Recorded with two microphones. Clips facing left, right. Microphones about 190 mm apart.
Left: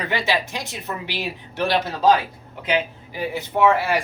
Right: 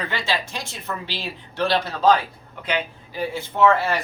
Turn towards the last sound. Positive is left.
turn(degrees=15)  # may be behind; listen again after turning